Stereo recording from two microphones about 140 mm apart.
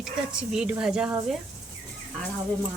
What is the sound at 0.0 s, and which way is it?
Speech, 5° right (ahead or behind).